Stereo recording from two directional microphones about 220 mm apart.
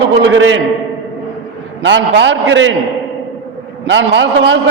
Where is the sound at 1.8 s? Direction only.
55° right (ahead or behind).